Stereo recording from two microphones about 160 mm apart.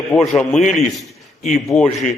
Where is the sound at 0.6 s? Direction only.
45° left (ahead or behind).